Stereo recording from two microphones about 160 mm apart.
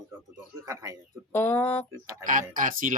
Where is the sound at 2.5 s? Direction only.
60° right (ahead or behind).